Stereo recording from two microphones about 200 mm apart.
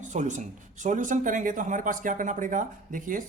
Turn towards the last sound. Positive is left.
turn(degrees=-40)  # may be behind; listen again after turning